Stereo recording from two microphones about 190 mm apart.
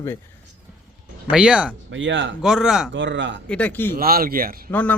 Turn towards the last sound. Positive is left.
turn(degrees=10)  # may be behind; listen again after turning